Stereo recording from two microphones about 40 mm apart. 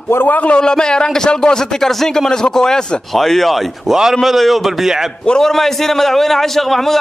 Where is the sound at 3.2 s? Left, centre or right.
Centre.